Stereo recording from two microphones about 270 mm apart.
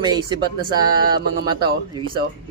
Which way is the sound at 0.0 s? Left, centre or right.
Centre.